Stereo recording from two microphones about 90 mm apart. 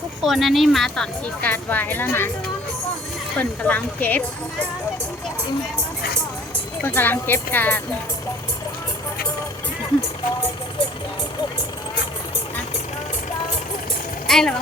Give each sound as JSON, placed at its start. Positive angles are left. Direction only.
{"t": 0.2, "sound": "speech", "side_deg": 0}
{"t": 1.4, "sound": "speech", "side_deg": 20}
{"t": 3.3, "sound": "speech", "side_deg": 15}
{"t": 6.8, "sound": "speech", "side_deg": 25}
{"t": 14.3, "sound": "speech", "side_deg": 5}